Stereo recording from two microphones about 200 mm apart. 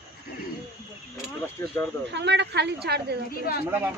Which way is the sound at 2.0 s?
60° right (ahead or behind).